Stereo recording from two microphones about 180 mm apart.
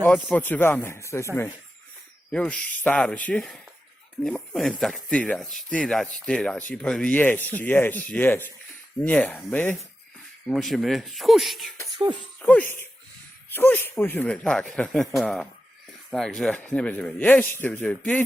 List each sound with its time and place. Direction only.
0.3 s speech: 10° left (ahead or behind)
2.3 s speech: 5° left (ahead or behind)
12.0 s speech: 25° right (ahead or behind)
12.4 s speech: 10° left (ahead or behind)